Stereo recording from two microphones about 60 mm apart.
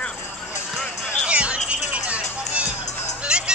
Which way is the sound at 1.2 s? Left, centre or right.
Centre.